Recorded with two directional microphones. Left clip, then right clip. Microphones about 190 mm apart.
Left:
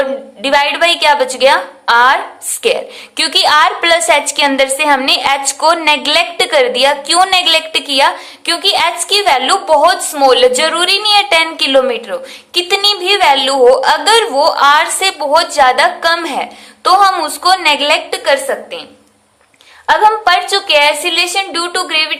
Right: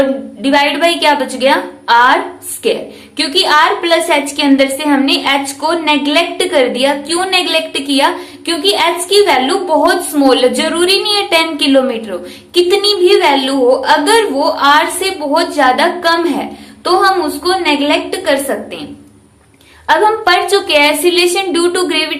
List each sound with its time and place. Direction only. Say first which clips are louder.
0.0 s a woman's voice: right 2 dB; 30° left (ahead or behind)
3.2 s a woman's voice: left 1 dB; 35° left (ahead or behind)
19.9 s a woman's voice: left 1 dB; 20° left (ahead or behind)